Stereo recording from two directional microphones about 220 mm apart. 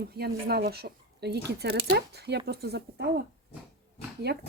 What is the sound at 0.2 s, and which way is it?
Speech, 45° right (ahead or behind).